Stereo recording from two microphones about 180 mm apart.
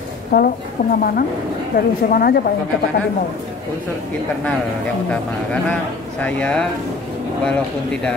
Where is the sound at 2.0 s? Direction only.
55° left (ahead or behind).